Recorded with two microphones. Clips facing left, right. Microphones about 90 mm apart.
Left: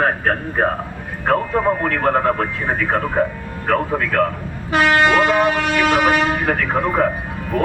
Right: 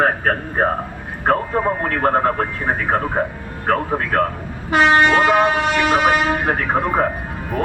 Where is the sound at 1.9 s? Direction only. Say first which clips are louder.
Even; 35° right (ahead or behind).